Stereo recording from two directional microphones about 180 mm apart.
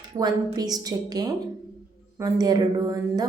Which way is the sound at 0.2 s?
20° right (ahead or behind).